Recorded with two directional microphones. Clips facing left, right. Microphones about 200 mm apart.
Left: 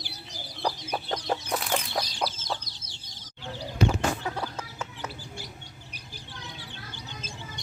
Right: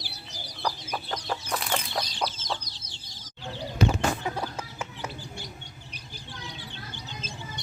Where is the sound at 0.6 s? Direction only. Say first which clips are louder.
Left 2 dB; 30° left (ahead or behind).